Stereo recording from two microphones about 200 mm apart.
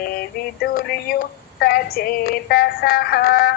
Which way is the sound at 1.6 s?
50° left (ahead or behind).